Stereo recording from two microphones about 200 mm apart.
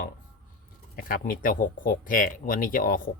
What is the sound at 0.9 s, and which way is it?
Speech, 45° left (ahead or behind).